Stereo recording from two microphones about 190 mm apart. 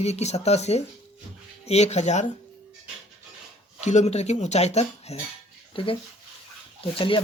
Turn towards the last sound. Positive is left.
turn(degrees=30)  # may be behind; listen again after turning